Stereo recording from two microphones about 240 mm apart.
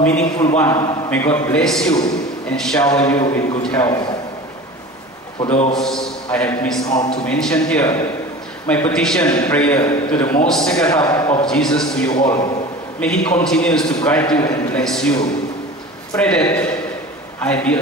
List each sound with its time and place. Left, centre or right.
0.0 s a man's voice: centre
2.8 s a man's voice: centre
5.8 s a man's voice: centre
9.2 s a man's voice: centre
10.9 s a man's voice: centre
12.1 s a man's voice: centre
13.4 s a man's voice: centre